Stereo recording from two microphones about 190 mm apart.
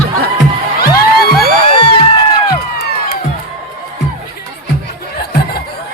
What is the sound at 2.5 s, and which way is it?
Music, 55° left (ahead or behind).